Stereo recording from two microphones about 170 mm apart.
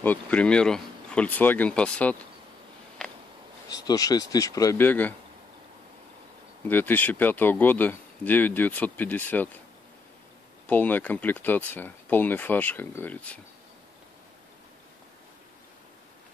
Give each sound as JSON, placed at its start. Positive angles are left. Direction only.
{"t": 0.0, "sound": "speech", "side_deg": 10}
{"t": 3.7, "sound": "speech", "side_deg": 20}
{"t": 6.6, "sound": "speech", "side_deg": 10}
{"t": 10.7, "sound": "speech", "side_deg": 10}